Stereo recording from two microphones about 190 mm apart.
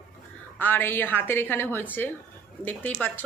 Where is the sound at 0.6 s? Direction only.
10° left (ahead or behind).